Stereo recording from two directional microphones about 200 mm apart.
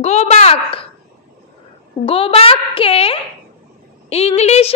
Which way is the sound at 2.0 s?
30° left (ahead or behind).